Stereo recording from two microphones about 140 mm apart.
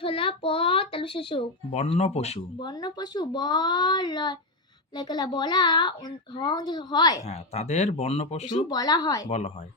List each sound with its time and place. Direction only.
0.0 s a child's voice: 40° left (ahead or behind)
1.7 s speech: 50° left (ahead or behind)
2.6 s a child's voice: 30° left (ahead or behind)
7.3 s speech: 50° left (ahead or behind)
8.7 s speech: 25° left (ahead or behind)
9.3 s speech: 55° left (ahead or behind)